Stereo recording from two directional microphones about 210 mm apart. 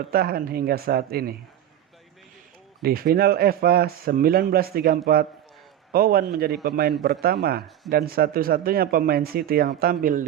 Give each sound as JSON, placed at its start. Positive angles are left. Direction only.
{"t": 0.1, "sound": "a man's voice", "side_deg": -45}
{"t": 2.8, "sound": "a man's voice", "side_deg": -45}